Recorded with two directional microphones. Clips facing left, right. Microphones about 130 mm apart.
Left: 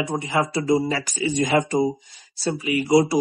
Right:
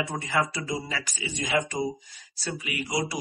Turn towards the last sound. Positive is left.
turn(degrees=35)  # may be behind; listen again after turning